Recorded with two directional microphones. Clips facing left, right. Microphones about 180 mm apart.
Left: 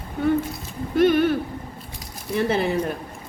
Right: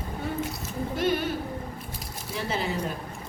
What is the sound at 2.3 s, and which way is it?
Speech, 60° left (ahead or behind).